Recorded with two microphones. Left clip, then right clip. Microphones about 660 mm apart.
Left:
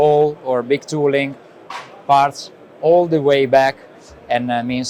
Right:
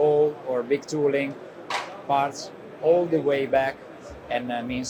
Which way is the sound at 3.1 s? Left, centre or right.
Left.